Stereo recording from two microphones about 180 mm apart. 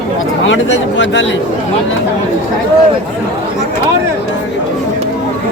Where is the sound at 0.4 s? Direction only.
90° left.